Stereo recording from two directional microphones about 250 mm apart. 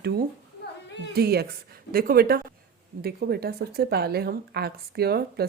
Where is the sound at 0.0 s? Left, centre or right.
Right.